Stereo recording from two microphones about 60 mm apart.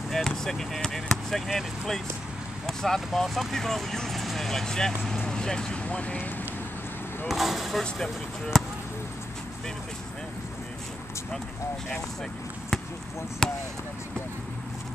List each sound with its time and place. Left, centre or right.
0.1 s speech: centre
7.2 s speech: centre
13.4 s speech: centre